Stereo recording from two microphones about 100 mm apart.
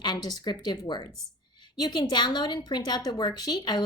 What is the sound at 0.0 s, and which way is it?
A woman's voice, 45° left (ahead or behind).